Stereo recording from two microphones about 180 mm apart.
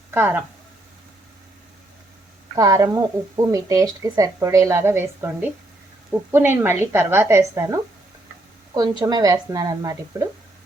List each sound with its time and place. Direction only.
0.1 s speech: 10° right (ahead or behind)
2.6 s speech: 20° right (ahead or behind)